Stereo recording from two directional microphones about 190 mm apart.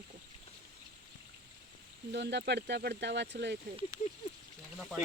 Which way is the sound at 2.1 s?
60° right (ahead or behind).